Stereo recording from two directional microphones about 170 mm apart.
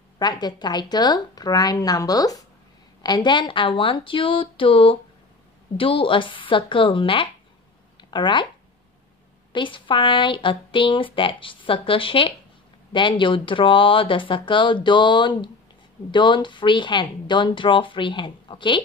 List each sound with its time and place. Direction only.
0.2 s a woman's voice: 25° left (ahead or behind)
9.5 s speech: 30° left (ahead or behind)